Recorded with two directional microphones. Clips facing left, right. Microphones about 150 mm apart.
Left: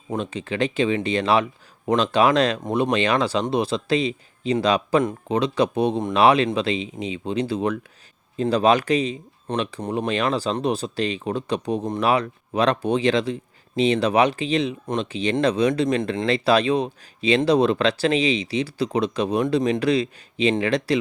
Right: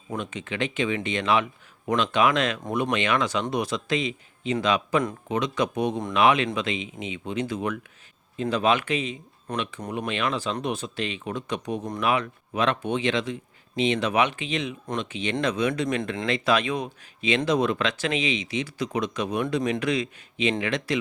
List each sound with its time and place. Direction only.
0.1 s speech: 30° left (ahead or behind)